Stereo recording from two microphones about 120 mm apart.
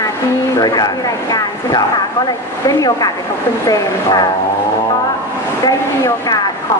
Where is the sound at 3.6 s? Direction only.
35° left (ahead or behind).